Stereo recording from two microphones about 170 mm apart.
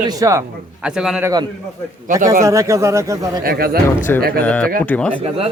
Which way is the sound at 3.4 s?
60° right (ahead or behind).